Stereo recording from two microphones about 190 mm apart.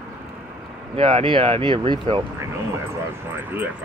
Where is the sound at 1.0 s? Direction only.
30° right (ahead or behind).